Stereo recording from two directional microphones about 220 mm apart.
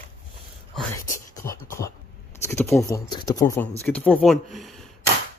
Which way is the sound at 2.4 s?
10° left (ahead or behind).